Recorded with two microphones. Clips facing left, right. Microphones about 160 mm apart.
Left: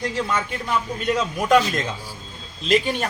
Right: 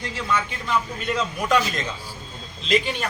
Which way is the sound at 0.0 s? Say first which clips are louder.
Left 2 dB; 45° left (ahead or behind).